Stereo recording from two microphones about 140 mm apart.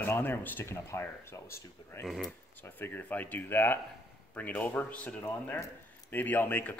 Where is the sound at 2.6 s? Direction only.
15° left (ahead or behind).